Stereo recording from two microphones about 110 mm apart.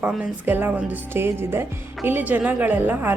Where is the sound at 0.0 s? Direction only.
10° right (ahead or behind).